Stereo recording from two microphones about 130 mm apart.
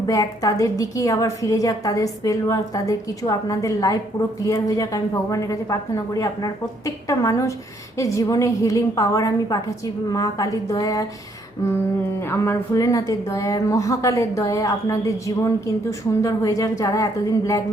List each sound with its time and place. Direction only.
0.1 s a woman's voice: 25° left (ahead or behind)
12.2 s a woman's voice: 20° left (ahead or behind)